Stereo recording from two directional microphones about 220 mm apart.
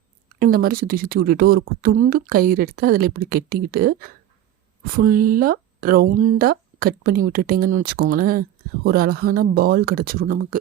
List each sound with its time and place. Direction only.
0.3 s speech: 40° right (ahead or behind)